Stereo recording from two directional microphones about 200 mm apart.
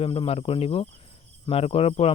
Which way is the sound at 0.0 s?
30° left (ahead or behind).